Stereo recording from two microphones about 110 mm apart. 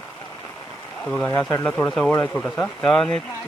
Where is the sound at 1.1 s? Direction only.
10° left (ahead or behind).